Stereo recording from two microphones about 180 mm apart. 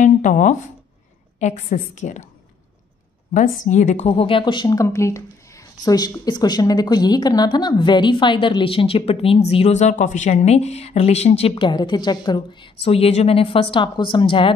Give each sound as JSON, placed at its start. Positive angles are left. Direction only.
{"t": 0.0, "sound": "a sound", "side_deg": 45}
{"t": 1.4, "sound": "a woman's voice", "side_deg": 40}
{"t": 3.3, "sound": "speech", "side_deg": 45}